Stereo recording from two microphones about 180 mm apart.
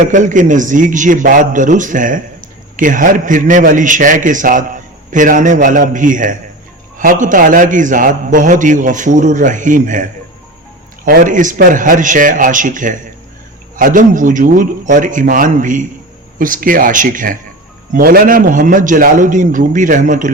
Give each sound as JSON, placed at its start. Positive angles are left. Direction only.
{"t": 0.0, "sound": "a man's voice", "side_deg": -45}